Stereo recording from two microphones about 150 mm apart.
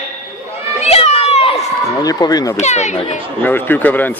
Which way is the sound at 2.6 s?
50° left (ahead or behind).